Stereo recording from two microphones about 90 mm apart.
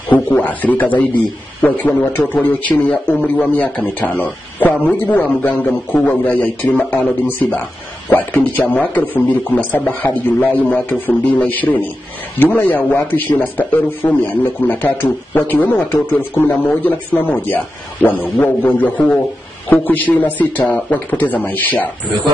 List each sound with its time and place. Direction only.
0.1 s a man's voice: 20° left (ahead or behind)